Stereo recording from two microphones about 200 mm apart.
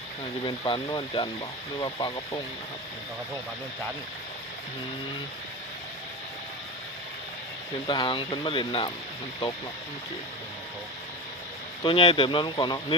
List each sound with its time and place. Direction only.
0.4 s speech: 20° left (ahead or behind)
7.9 s speech: 25° left (ahead or behind)
11.8 s speech: 25° left (ahead or behind)